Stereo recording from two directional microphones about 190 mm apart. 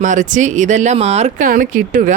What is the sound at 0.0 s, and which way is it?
Speech, 40° right (ahead or behind).